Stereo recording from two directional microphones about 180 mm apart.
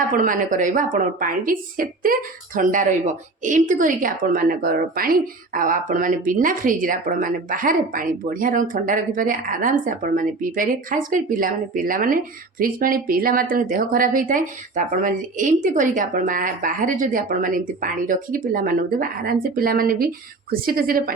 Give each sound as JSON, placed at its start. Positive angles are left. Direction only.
{"t": 0.1, "sound": "a woman's voice", "side_deg": -50}